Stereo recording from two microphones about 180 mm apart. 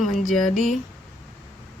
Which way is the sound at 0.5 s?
45° left (ahead or behind).